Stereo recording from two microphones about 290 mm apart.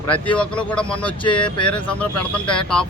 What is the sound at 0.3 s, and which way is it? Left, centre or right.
Speech, centre.